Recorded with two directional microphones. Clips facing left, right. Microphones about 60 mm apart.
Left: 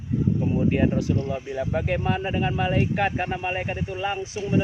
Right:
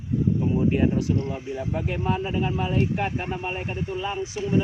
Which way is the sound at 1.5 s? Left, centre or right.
Left.